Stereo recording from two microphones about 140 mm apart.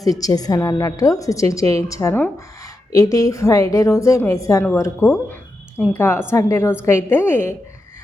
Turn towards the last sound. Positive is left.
turn(degrees=15)  # may be behind; listen again after turning